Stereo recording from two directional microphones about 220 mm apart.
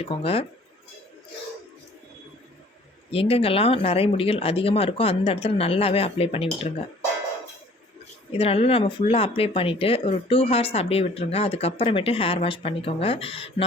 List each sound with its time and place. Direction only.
0.0 s speech: 25° left (ahead or behind)
3.1 s speech: 25° left (ahead or behind)
8.3 s speech: 25° left (ahead or behind)